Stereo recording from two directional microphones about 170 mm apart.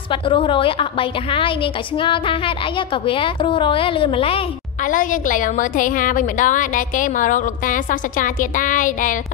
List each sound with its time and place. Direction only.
0.1 s a woman's voice: 30° left (ahead or behind)
4.8 s a woman's voice: 50° left (ahead or behind)